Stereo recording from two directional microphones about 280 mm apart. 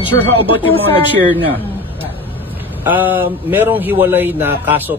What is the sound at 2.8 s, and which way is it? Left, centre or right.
A man's voice, centre.